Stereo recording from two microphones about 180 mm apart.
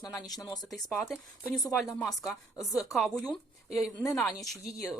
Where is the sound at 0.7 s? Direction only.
Centre (ahead or behind).